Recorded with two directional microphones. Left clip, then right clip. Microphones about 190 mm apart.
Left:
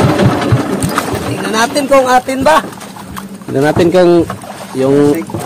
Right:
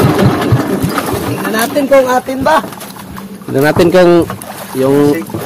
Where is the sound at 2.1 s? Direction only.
10° left (ahead or behind).